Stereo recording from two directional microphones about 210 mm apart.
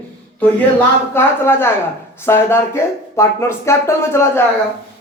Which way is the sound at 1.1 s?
10° left (ahead or behind).